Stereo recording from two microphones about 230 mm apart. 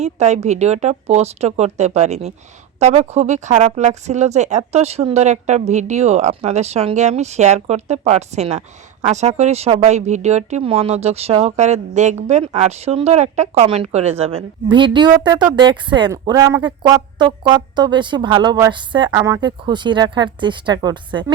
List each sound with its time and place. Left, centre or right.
0.0 s speech: right